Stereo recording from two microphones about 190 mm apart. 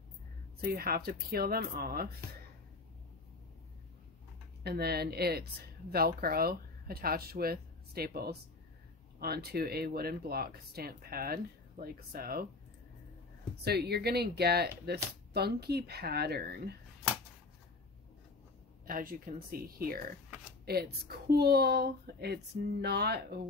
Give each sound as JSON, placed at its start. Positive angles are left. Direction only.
{"t": 0.6, "sound": "speech", "side_deg": -50}
{"t": 4.6, "sound": "speech", "side_deg": -55}
{"t": 13.7, "sound": "speech", "side_deg": -60}
{"t": 18.9, "sound": "speech", "side_deg": -45}